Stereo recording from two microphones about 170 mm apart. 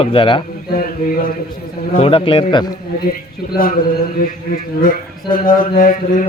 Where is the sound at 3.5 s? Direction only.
60° left (ahead or behind).